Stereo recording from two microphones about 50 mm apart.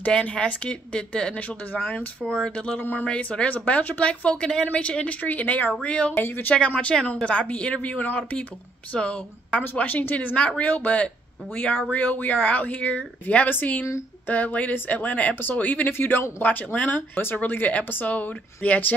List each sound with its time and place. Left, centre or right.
0.2 s speech: left
1.7 s speech: left
2.2 s speech: centre
2.8 s speech: left
3.1 s speech: left
5.8 s speech: left
6.1 s speech: left
6.7 s speech: left
9.6 s speech: left
15.9 s a man's voice: left
16.4 s speech: left